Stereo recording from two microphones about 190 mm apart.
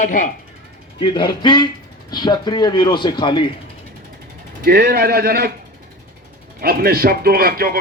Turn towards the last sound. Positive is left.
turn(degrees=-50)  # may be behind; listen again after turning